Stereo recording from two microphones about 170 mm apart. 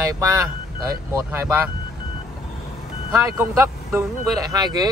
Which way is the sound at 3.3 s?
10° right (ahead or behind).